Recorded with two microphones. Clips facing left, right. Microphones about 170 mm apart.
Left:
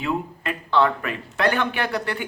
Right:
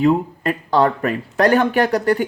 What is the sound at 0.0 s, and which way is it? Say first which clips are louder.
Speech: right 10 dB; 40° right (ahead or behind).